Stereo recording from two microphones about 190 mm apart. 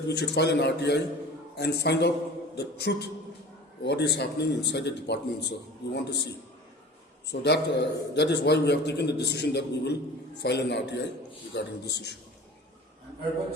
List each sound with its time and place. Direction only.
0.1 s a man's voice: 60° left (ahead or behind)
7.3 s a man's voice: 65° left (ahead or behind)